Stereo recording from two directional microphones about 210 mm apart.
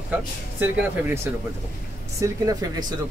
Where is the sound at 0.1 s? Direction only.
10° right (ahead or behind).